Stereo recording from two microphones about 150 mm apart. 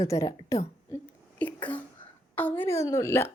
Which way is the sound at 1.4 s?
10° left (ahead or behind).